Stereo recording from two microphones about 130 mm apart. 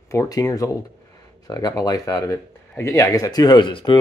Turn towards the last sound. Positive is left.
turn(degrees=40)  # may be behind; listen again after turning